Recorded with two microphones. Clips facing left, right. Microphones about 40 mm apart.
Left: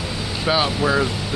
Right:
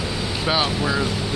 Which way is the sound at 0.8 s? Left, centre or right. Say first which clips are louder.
Left 3 dB; centre.